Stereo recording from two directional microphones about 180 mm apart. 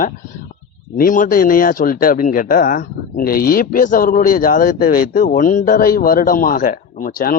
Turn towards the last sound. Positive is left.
turn(degrees=50)  # may be behind; listen again after turning